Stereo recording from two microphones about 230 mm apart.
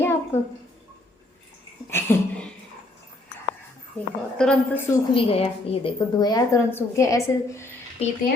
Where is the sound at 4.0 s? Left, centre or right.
Centre.